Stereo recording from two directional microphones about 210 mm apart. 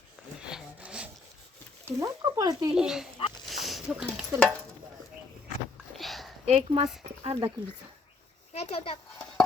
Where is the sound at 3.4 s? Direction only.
Centre (ahead or behind).